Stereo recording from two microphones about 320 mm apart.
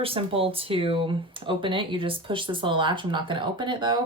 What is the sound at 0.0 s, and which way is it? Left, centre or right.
Speech, centre.